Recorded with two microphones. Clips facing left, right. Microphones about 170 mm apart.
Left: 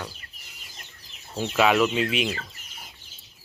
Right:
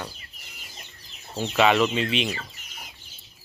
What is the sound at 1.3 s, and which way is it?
Speech, centre (ahead or behind).